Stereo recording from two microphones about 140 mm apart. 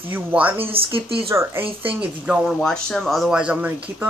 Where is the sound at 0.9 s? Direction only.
40° right (ahead or behind).